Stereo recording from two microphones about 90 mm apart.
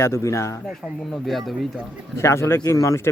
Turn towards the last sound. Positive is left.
turn(degrees=35)  # may be behind; listen again after turning